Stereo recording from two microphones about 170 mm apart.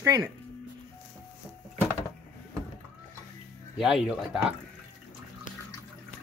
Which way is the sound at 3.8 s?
Centre (ahead or behind).